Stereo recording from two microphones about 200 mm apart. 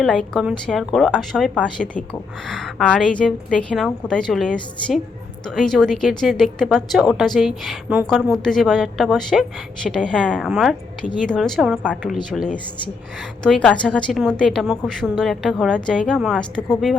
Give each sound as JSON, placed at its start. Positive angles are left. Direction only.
{"t": 0.0, "sound": "a woman's voice", "side_deg": 0}